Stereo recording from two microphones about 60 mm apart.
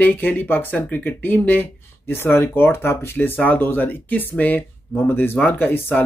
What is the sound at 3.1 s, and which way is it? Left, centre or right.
Speech, left.